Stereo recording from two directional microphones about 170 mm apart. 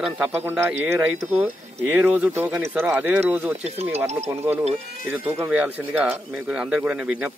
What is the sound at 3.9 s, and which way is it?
Speech, 40° right (ahead or behind).